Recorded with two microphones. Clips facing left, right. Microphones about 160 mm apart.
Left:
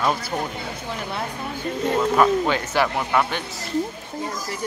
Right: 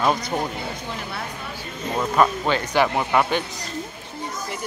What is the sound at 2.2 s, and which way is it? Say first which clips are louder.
Speech: right 2 dB; 5° left (ahead or behind).